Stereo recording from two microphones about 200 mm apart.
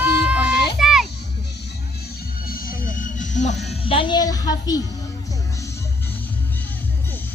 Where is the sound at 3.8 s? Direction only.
25° left (ahead or behind).